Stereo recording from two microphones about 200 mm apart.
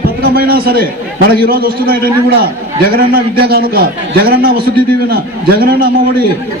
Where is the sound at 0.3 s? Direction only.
50° right (ahead or behind).